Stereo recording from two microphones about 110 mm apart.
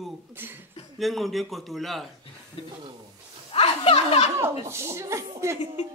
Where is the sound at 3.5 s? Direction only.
65° left (ahead or behind).